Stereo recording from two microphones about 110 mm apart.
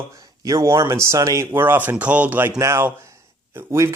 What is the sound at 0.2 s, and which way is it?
Speech, 30° right (ahead or behind).